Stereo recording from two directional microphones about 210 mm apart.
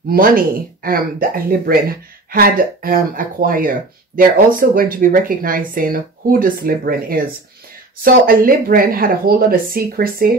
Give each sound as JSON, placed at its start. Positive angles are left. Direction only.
{"t": 0.1, "sound": "speech", "side_deg": -45}